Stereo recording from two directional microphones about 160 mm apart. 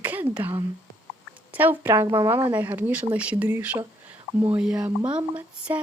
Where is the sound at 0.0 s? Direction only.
10° right (ahead or behind).